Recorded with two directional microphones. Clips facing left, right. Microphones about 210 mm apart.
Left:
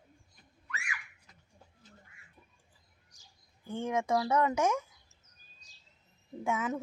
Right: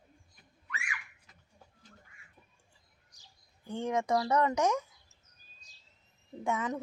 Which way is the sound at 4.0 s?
5° left (ahead or behind).